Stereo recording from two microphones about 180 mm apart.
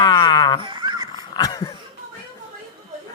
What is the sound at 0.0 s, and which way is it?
Music, 25° left (ahead or behind).